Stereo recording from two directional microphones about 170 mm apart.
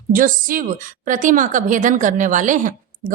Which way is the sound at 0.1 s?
55° right (ahead or behind).